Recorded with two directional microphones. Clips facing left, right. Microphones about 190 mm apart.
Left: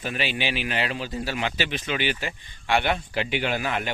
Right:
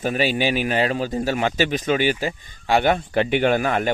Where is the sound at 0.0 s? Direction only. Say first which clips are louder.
Right 8 dB; 40° right (ahead or behind).